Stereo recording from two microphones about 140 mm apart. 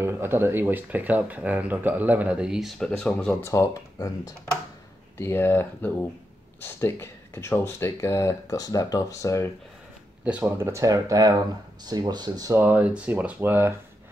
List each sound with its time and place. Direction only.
0.0 s speech: 15° right (ahead or behind); by 3.3 s 5° left (ahead or behind)
3.4 s speech: 20° left (ahead or behind)
10.2 s speech: 10° right (ahead or behind)
10.7 s speech: 25° right (ahead or behind)
12.5 s speech: 15° right (ahead or behind)